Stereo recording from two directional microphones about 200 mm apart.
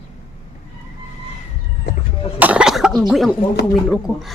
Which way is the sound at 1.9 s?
55° left (ahead or behind).